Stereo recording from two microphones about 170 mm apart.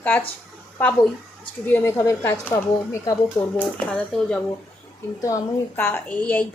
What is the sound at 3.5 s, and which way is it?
A woman's voice, 5° left (ahead or behind).